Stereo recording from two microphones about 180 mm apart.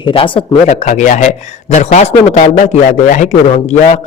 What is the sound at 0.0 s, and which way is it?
A man's voice, 30° left (ahead or behind).